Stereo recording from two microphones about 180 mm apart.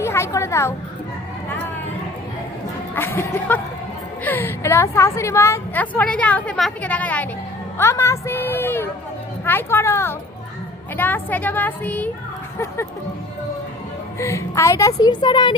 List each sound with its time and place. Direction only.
0.0 s speech: 15° left (ahead or behind)
2.9 s a woman's voice: 15° left (ahead or behind)
14.2 s a woman's voice: 15° left (ahead or behind)